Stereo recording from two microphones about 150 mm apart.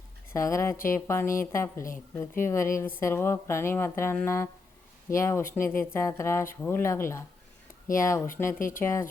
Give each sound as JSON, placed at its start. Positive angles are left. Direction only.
{"t": 0.3, "sound": "speech", "side_deg": 20}
{"t": 8.5, "sound": "speech", "side_deg": 65}
{"t": 8.8, "sound": "speech", "side_deg": 20}